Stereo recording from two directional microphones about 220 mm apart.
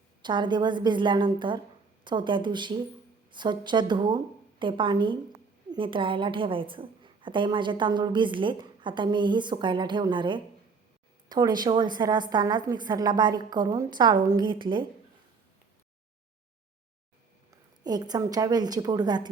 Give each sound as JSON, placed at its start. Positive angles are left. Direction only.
{"t": 0.2, "sound": "a woman's voice", "side_deg": -20}
{"t": 17.8, "sound": "a woman's voice", "side_deg": -20}